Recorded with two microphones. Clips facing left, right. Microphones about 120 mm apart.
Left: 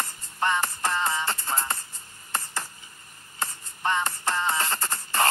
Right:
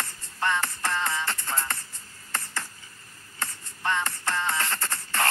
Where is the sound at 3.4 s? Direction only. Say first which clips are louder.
Left 2 dB; 15° left (ahead or behind).